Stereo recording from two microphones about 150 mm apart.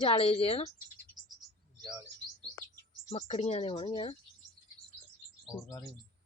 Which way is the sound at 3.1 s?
40° left (ahead or behind).